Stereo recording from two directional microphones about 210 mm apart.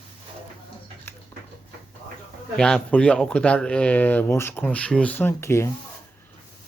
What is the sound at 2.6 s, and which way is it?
Speech, 5° left (ahead or behind).